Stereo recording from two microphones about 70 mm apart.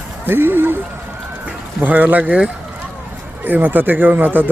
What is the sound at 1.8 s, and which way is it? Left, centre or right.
Speech, right.